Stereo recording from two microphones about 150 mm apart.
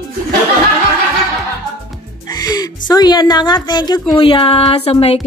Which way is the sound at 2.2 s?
25° left (ahead or behind).